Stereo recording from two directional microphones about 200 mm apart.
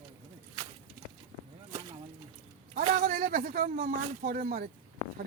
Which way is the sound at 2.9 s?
45° right (ahead or behind).